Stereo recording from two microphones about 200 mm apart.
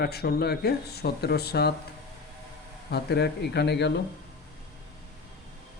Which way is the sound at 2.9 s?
55° left (ahead or behind).